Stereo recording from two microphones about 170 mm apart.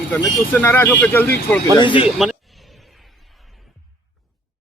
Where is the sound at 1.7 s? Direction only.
30° left (ahead or behind).